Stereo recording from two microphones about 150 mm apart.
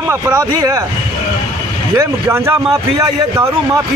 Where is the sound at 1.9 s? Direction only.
15° right (ahead or behind).